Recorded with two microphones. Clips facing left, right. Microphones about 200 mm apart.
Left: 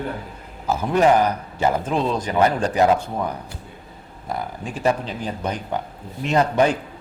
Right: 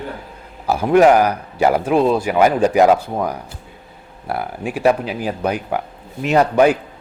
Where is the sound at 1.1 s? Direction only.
10° right (ahead or behind).